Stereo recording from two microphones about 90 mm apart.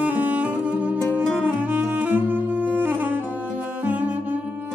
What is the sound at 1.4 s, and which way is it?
Saxophone, 15° right (ahead or behind).